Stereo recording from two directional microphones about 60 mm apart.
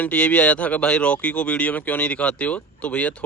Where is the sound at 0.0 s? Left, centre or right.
Left.